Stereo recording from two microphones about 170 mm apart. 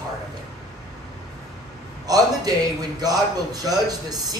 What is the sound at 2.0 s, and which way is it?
A man's voice, 20° right (ahead or behind).